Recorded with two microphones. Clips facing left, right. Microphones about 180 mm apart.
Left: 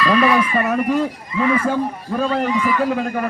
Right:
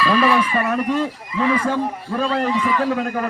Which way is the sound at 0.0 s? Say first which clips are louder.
Left 1 dB; centre (ahead or behind).